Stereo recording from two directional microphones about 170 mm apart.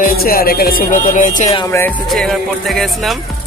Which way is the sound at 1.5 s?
20° left (ahead or behind).